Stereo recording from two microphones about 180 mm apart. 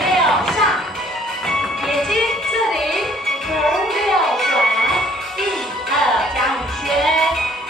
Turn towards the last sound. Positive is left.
turn(degrees=0)  # may be behind; listen again after turning